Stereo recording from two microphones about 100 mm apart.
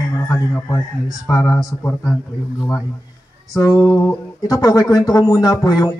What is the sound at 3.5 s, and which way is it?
A man's voice, 35° left (ahead or behind).